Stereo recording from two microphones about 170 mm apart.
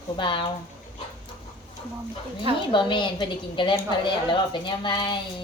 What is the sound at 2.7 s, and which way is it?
A woman's voice, 30° left (ahead or behind).